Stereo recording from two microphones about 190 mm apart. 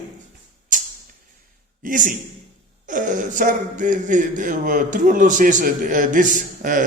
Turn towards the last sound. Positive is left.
turn(degrees=-45)  # may be behind; listen again after turning